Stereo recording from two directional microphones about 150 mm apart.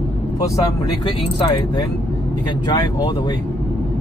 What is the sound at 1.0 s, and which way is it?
Speech, 35° left (ahead or behind).